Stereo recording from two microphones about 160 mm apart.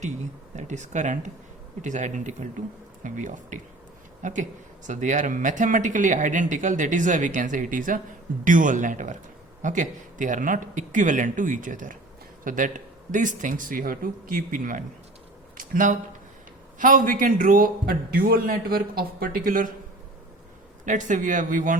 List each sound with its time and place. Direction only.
0.5 s a man's voice: 50° right (ahead or behind)
15.5 s a sound: 55° right (ahead or behind)
16.7 s a man's voice: 55° right (ahead or behind)
20.8 s speech: 50° right (ahead or behind)